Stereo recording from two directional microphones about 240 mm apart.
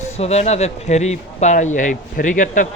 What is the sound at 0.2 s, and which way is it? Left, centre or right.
Speech, left.